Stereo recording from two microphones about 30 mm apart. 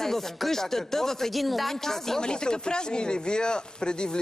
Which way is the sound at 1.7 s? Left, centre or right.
Centre.